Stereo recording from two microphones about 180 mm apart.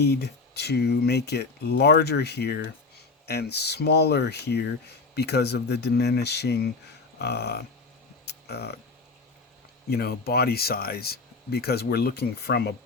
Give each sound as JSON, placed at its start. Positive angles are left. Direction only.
{"t": 0.0, "sound": "speech", "side_deg": 65}
{"t": 8.2, "sound": "a sound", "side_deg": 65}
{"t": 9.9, "sound": "speech", "side_deg": 60}